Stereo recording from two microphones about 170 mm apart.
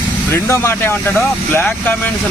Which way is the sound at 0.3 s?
15° left (ahead or behind).